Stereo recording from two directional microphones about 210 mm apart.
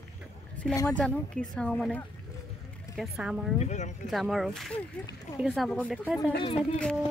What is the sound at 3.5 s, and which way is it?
Speech, 35° left (ahead or behind).